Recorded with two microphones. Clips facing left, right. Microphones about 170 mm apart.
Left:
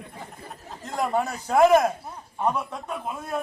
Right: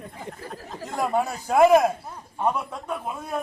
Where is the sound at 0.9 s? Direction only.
5° right (ahead or behind).